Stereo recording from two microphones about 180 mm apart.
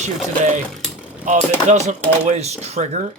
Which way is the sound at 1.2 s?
40° right (ahead or behind).